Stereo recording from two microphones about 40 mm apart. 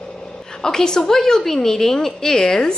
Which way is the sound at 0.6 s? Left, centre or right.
Centre.